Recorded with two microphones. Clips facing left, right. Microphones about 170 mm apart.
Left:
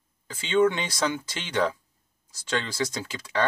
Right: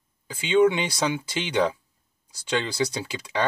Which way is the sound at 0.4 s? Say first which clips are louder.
Right 3 dB; 15° right (ahead or behind).